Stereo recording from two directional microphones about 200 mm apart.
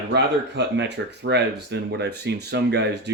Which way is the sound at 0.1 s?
60° right (ahead or behind).